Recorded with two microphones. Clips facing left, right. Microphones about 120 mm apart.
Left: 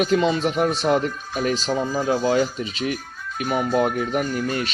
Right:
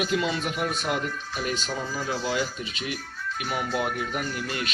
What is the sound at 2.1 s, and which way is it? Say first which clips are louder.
Speech: left 8 dB; 50° left (ahead or behind).